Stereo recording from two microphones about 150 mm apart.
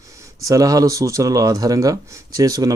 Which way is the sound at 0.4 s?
25° right (ahead or behind).